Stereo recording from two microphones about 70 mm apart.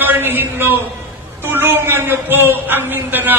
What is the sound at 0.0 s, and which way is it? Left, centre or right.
A man's voice, right.